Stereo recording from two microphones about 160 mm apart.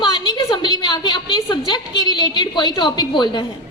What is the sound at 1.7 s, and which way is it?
A woman's voice, 25° left (ahead or behind).